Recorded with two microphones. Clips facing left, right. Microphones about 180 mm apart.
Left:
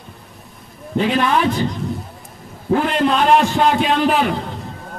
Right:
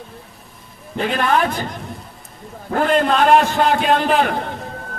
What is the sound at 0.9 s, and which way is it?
A man's voice, 50° right (ahead or behind).